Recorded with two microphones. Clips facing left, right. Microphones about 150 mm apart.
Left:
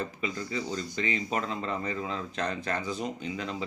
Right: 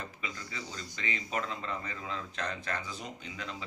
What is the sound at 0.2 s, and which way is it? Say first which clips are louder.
Speech: left 9 dB; 25° left (ahead or behind).